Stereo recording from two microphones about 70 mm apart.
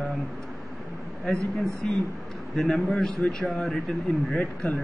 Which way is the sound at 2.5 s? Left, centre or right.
Centre.